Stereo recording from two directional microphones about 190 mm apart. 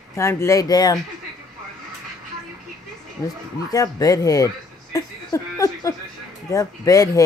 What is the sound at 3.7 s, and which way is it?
A woman's voice, 20° left (ahead or behind).